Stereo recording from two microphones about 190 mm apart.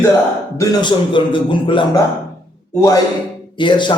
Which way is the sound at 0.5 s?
20° left (ahead or behind).